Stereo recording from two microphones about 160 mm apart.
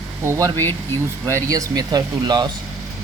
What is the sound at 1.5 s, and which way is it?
Speech, 25° right (ahead or behind).